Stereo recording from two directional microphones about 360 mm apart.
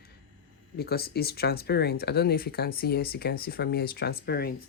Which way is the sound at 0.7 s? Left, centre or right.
Left.